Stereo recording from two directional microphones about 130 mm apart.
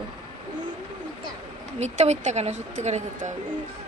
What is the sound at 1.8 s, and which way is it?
Speech, 60° right (ahead or behind).